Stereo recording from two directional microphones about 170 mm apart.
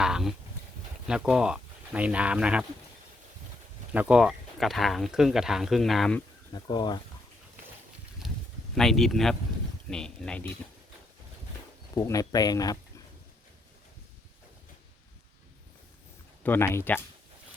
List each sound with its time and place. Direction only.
0.0 s a sound: 5° right (ahead or behind)
1.0 s speech: 5° right (ahead or behind)
3.9 s speech: 10° right (ahead or behind)
6.5 s speech: 25° left (ahead or behind)
8.7 s speech: centre (ahead or behind)
11.9 s speech: 20° left (ahead or behind)
16.4 s speech: 15° left (ahead or behind)